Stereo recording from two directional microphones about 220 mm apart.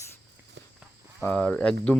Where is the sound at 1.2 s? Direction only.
5° left (ahead or behind).